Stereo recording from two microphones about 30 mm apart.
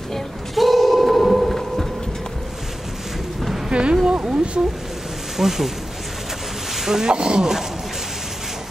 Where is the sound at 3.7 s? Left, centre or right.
Right.